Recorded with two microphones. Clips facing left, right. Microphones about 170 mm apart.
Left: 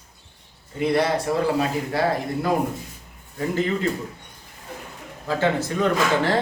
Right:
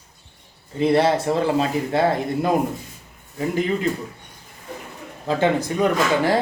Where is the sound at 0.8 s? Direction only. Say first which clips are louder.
Right 3 dB; 25° right (ahead or behind).